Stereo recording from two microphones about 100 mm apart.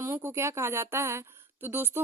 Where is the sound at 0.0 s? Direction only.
25° right (ahead or behind).